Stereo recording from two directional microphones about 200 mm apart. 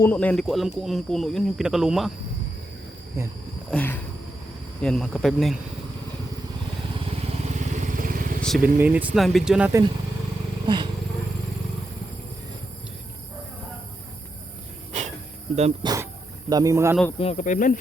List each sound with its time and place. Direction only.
0.0 s speech: 10° left (ahead or behind)
3.7 s a sound: 10° left (ahead or behind)
4.8 s speech: 5° left (ahead or behind)
6.9 s vehicle: 30° right (ahead or behind)
8.4 s vehicle: centre (ahead or behind)
8.6 s speech: 10° right (ahead or behind)
15.5 s speech: 30° right (ahead or behind)
16.5 s speech: 15° right (ahead or behind)
17.2 s speech: 35° left (ahead or behind)